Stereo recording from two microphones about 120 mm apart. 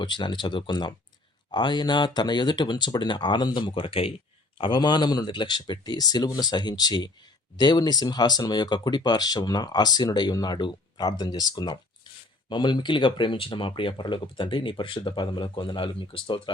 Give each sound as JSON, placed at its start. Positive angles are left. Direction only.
{"t": 0.0, "sound": "speech", "side_deg": 40}